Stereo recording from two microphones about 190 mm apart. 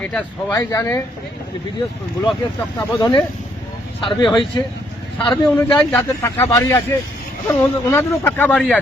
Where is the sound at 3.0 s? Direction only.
20° left (ahead or behind).